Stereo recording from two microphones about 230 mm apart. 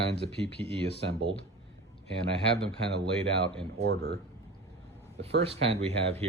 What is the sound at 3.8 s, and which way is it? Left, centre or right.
Speech, right.